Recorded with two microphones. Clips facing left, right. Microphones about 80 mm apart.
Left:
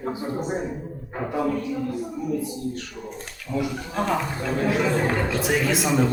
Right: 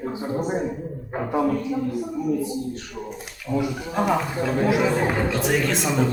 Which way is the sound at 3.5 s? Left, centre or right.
Centre.